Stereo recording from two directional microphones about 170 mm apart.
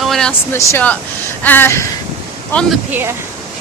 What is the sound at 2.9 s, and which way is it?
Speech, 15° right (ahead or behind).